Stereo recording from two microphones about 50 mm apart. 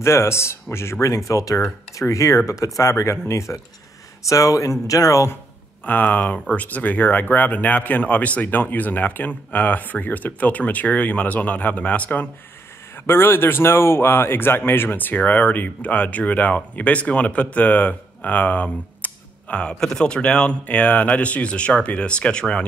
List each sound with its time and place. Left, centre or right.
0.0 s speech: left
1.0 s speech: left
4.2 s speech: left
5.9 s speech: left
12.9 s speech: left
19.8 s speech: centre
20.2 s speech: left